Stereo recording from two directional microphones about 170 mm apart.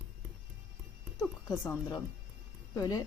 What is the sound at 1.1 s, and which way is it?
Speech, 20° left (ahead or behind).